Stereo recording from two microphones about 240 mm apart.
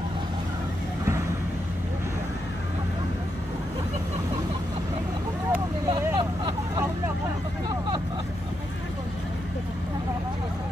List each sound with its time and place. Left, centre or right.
5.5 s vehicle: centre